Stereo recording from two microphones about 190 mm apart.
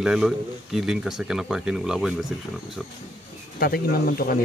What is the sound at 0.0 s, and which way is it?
A man's voice, 5° right (ahead or behind).